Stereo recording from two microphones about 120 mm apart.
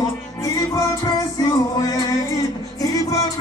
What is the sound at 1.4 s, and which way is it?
Music, 30° left (ahead or behind).